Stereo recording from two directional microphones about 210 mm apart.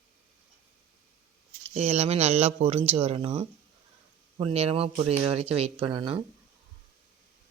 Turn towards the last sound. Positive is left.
turn(degrees=-25)  # may be behind; listen again after turning